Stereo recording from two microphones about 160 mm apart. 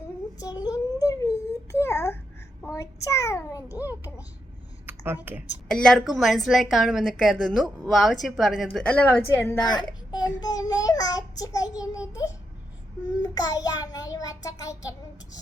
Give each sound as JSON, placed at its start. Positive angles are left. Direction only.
{"t": 0.3, "sound": "a sound", "side_deg": 25}
{"t": 2.6, "sound": "child singing", "side_deg": 20}
{"t": 4.9, "sound": "speech", "side_deg": -10}
{"t": 5.6, "sound": "a woman's voice", "side_deg": 5}
{"t": 9.6, "sound": "a child's voice", "side_deg": 25}
{"t": 13.2, "sound": "child singing", "side_deg": 25}